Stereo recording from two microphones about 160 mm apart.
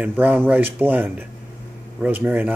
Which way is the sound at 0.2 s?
10° right (ahead or behind).